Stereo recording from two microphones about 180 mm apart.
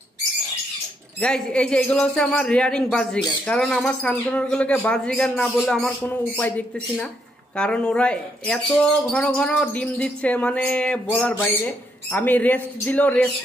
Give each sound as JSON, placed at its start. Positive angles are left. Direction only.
{"t": 1.2, "sound": "speech", "side_deg": 5}